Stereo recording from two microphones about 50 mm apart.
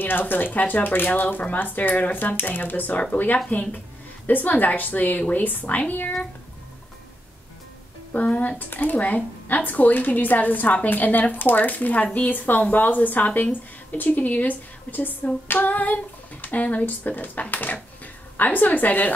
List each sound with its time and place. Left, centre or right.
0.0 s a woman's voice: left
8.1 s a woman's voice: left